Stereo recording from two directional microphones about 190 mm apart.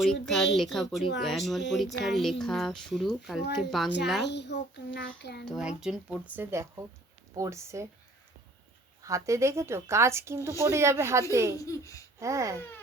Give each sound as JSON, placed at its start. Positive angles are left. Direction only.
{"t": 0.0, "sound": "speech", "side_deg": 0}
{"t": 4.2, "sound": "a child's voice", "side_deg": 65}
{"t": 5.5, "sound": "a woman's voice", "side_deg": -5}
{"t": 9.0, "sound": "a woman's voice", "side_deg": -15}
{"t": 11.6, "sound": "speech", "side_deg": 15}
{"t": 12.2, "sound": "a woman's voice", "side_deg": -15}